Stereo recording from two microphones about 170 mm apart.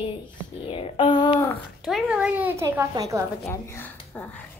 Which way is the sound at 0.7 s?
30° left (ahead or behind).